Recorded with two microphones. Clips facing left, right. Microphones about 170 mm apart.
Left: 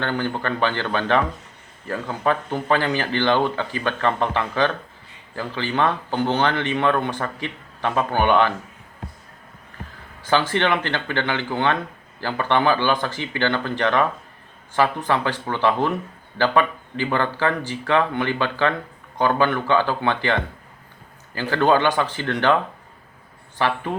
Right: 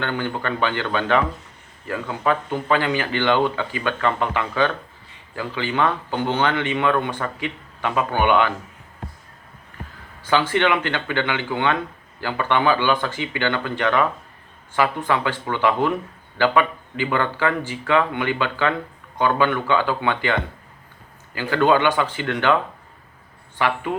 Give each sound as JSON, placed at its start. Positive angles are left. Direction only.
{"t": 0.0, "sound": "speech", "side_deg": 35}
{"t": 10.5, "sound": "speech", "side_deg": 35}
{"t": 21.3, "sound": "speech", "side_deg": 35}
{"t": 23.6, "sound": "speech", "side_deg": 35}